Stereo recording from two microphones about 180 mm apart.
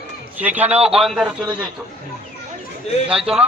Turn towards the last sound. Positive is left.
turn(degrees=-5)  # may be behind; listen again after turning